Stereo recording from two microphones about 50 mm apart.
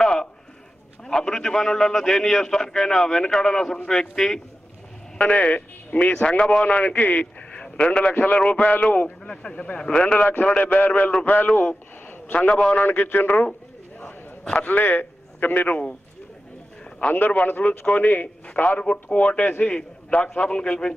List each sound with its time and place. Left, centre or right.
0.0 s a sound: centre
1.0 s a man's voice: centre
5.1 s a man's voice: left
8.4 s a man's voice: centre
12.8 s speech: left
14.6 s a man's voice: left
17.1 s a man's voice: left